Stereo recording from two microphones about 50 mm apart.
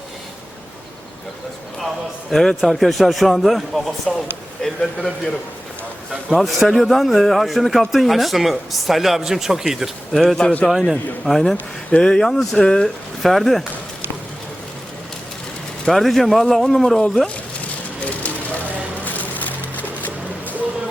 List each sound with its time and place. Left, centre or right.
2.3 s a man's voice: centre
6.3 s a man's voice: centre
13.2 s a man's voice: centre
15.9 s a man's voice: centre
19.0 s a sound: left